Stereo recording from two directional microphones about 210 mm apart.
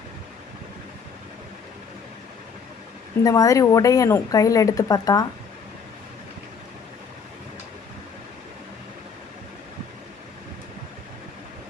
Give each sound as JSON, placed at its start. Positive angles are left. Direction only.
{"t": 3.2, "sound": "speech", "side_deg": 15}